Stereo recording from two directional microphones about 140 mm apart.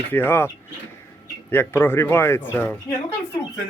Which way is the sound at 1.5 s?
15° left (ahead or behind).